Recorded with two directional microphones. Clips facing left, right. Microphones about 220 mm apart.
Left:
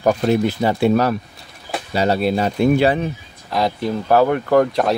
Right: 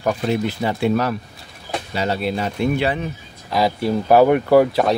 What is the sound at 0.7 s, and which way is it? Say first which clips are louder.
Speech: left 3 dB; 40° left (ahead or behind).